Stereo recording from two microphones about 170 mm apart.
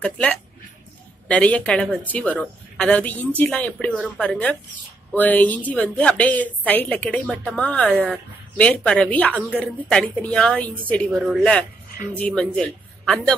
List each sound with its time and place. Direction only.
0.0 s a woman's voice: 5° left (ahead or behind)